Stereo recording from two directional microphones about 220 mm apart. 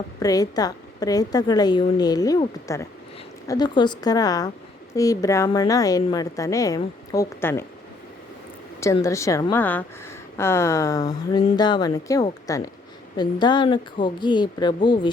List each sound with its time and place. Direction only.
0.2 s a woman's voice: 15° left (ahead or behind)
8.8 s a woman's voice: 15° left (ahead or behind)